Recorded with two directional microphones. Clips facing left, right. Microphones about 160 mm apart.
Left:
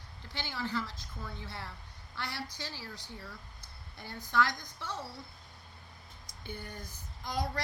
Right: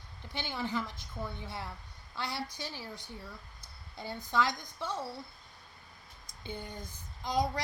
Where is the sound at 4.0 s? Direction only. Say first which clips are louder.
Even; 20° right (ahead or behind).